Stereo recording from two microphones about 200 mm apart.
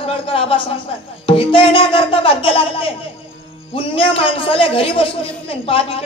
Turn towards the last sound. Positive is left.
turn(degrees=25)  # may be behind; listen again after turning